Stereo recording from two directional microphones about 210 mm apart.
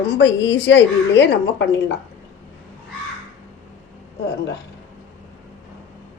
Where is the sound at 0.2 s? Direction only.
60° left (ahead or behind).